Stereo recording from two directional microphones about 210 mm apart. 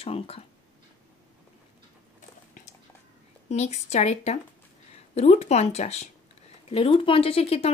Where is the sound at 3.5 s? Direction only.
35° left (ahead or behind).